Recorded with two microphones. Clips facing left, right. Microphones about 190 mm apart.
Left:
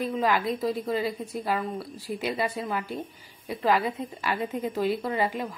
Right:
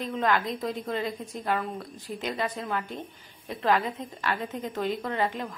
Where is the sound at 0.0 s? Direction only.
5° left (ahead or behind).